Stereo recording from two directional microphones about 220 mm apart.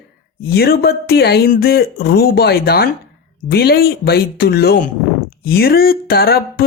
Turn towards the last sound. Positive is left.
turn(degrees=45)  # may be behind; listen again after turning